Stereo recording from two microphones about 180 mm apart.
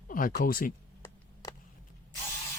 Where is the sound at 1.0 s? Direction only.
20° left (ahead or behind).